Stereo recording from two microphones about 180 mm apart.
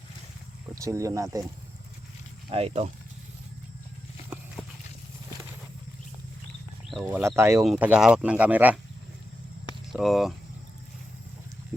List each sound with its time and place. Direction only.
0.8 s speech: 15° right (ahead or behind)
2.5 s speech: 30° right (ahead or behind)
6.9 s speech: 5° right (ahead or behind)
7.2 s speech: 15° right (ahead or behind)
7.6 s speech: 5° right (ahead or behind)
9.9 s speech: centre (ahead or behind)